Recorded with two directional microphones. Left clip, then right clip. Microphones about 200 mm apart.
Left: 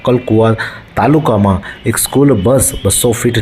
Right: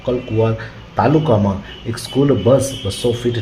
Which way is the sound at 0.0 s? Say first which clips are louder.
Left 7 dB; 25° left (ahead or behind).